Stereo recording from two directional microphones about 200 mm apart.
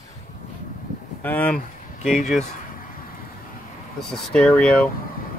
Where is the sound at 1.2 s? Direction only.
10° left (ahead or behind).